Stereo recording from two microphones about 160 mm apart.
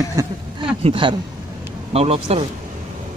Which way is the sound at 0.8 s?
30° right (ahead or behind).